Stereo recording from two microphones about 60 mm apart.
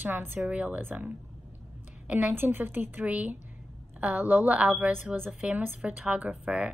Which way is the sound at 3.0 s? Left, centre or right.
Right.